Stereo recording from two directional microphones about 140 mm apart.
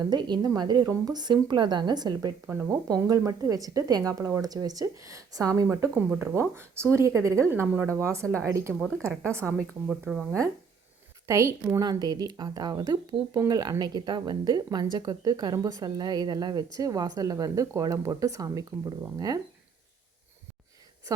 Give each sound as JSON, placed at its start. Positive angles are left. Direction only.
{"t": 0.0, "sound": "a woman's voice", "side_deg": -30}
{"t": 8.8, "sound": "speech", "side_deg": 5}
{"t": 11.3, "sound": "a woman's voice", "side_deg": -20}